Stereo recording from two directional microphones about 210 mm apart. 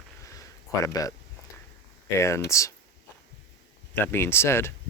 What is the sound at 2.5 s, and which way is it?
Speech, 15° left (ahead or behind).